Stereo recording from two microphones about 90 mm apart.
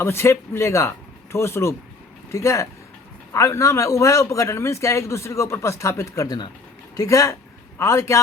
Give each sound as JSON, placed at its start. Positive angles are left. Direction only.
{"t": 0.0, "sound": "a man's voice", "side_deg": 30}